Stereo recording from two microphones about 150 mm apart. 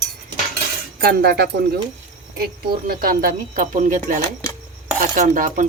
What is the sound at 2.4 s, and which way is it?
Speech, 75° right (ahead or behind).